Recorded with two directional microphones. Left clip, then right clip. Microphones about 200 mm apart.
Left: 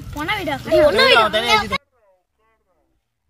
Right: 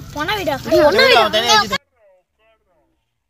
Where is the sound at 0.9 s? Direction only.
15° right (ahead or behind).